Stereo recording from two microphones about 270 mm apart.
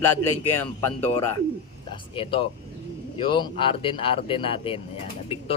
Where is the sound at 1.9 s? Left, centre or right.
Centre.